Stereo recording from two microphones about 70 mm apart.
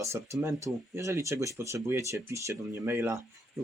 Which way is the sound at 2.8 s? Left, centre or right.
Right.